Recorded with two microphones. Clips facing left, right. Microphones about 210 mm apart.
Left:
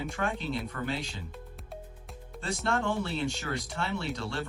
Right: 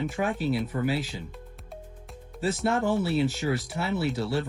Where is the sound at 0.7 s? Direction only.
20° right (ahead or behind).